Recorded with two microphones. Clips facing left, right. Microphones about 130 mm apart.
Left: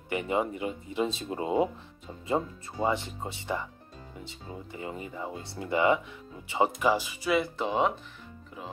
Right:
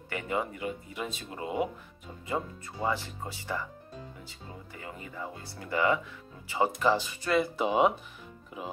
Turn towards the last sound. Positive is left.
turn(degrees=-10)  # may be behind; listen again after turning